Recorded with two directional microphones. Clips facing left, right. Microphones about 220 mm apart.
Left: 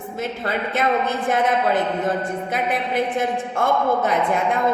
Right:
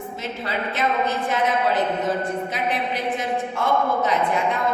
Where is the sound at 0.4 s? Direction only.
50° left (ahead or behind).